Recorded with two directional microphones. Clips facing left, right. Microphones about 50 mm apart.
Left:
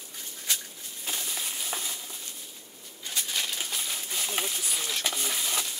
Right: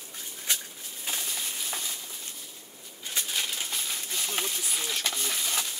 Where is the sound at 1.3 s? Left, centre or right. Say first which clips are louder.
Left 1 dB; centre.